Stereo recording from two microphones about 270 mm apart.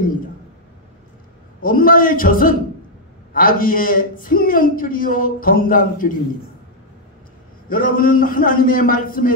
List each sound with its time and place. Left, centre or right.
1.6 s a man's voice: left
7.7 s a man's voice: left